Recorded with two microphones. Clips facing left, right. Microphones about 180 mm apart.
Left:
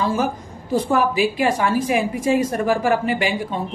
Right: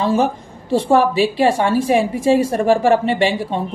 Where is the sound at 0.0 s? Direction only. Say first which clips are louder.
Right 4 dB; 30° right (ahead or behind).